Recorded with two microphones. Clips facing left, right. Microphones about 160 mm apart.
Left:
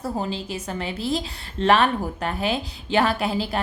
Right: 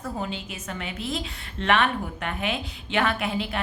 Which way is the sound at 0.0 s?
30° left (ahead or behind).